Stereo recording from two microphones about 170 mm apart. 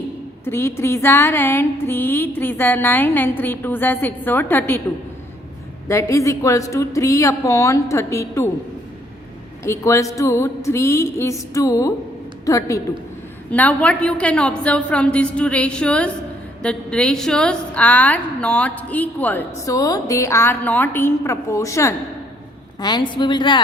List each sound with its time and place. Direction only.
0.4 s a woman's voice: 15° left (ahead or behind)
5.9 s a woman's voice: 15° left (ahead or behind)
9.6 s a woman's voice: 20° left (ahead or behind)